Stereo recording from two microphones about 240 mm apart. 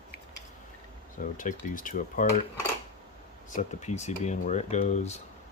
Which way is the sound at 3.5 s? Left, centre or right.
Left.